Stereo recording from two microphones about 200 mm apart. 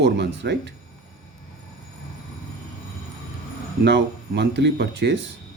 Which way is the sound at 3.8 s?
60° right (ahead or behind).